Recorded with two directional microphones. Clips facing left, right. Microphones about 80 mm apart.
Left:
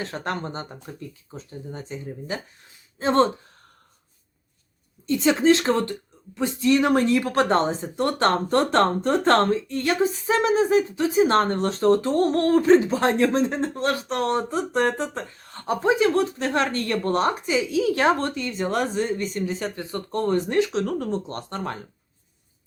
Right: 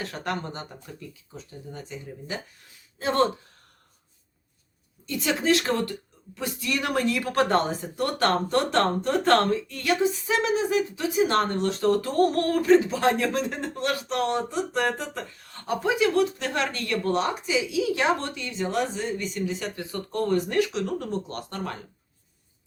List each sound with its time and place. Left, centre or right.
0.0 s speech: left
5.0 s speech: left